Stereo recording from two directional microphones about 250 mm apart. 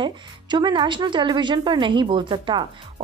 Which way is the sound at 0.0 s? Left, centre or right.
Centre.